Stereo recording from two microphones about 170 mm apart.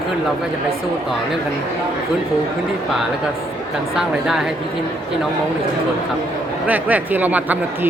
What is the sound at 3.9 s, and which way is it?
Speech, 5° right (ahead or behind).